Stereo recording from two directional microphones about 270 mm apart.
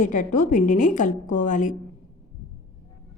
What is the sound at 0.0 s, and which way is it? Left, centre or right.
A woman's voice, left.